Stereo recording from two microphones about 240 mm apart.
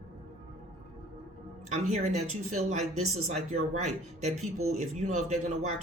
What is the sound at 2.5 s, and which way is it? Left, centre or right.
Speech, right.